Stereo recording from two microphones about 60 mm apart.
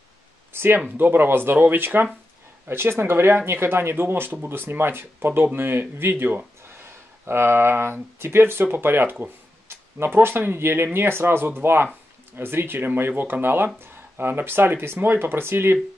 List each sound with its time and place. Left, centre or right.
0.5 s speech: right